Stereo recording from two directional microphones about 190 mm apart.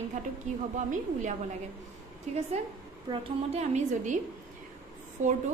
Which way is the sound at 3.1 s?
30° right (ahead or behind).